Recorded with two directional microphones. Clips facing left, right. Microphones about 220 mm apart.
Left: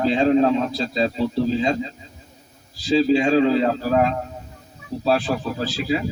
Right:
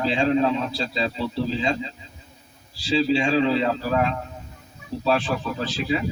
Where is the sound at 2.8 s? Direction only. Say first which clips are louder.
Left 4 dB; 40° left (ahead or behind).